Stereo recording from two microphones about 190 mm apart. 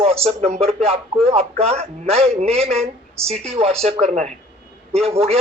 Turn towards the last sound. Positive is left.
turn(degrees=-30)  # may be behind; listen again after turning